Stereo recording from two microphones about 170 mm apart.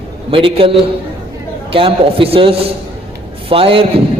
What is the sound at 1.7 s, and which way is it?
A man's voice, 30° right (ahead or behind).